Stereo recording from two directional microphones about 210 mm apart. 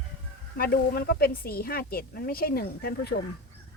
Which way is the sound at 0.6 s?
45° left (ahead or behind).